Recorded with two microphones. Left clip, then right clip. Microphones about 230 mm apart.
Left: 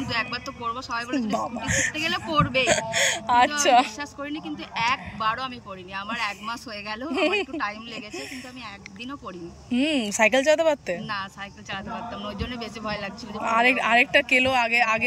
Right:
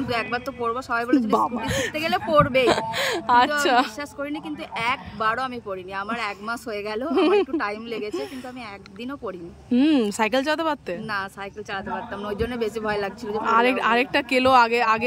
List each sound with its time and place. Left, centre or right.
0.0 s a man's voice: centre
9.7 s a man's voice: centre